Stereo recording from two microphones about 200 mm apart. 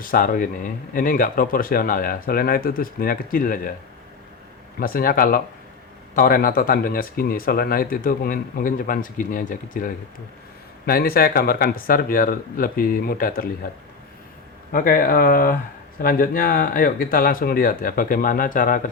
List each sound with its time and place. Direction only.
0.0 s speech: 45° left (ahead or behind)
4.8 s speech: 45° left (ahead or behind)
14.7 s speech: 45° left (ahead or behind)